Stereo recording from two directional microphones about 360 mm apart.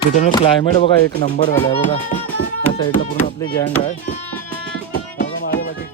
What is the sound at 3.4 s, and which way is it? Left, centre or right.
Speech, centre.